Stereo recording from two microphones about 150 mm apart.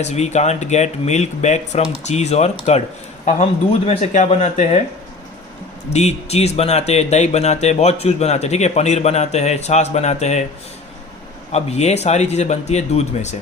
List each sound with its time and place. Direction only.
0.0 s speech: 45° left (ahead or behind)
3.8 s speech: 50° left (ahead or behind)
5.9 s speech: 45° left (ahead or behind)
11.5 s speech: 45° left (ahead or behind)